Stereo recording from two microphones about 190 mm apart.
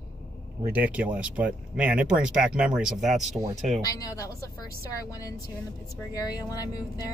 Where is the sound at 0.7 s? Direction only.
10° right (ahead or behind).